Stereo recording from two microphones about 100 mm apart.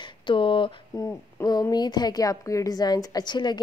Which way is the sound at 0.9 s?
35° left (ahead or behind).